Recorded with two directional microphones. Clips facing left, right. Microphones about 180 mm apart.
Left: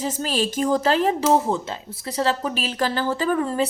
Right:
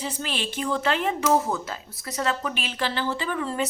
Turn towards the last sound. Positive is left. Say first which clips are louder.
# left 6 dB
turn(degrees=40)  # may be behind; listen again after turning